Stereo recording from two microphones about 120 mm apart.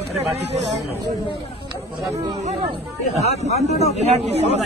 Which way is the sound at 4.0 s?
70° right (ahead or behind).